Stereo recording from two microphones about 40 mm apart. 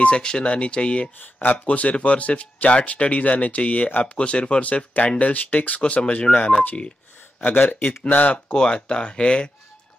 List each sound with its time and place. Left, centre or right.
0.0 s speech: left
1.2 s speech: left
5.8 s speech: left
7.3 s speech: left
8.5 s speech: left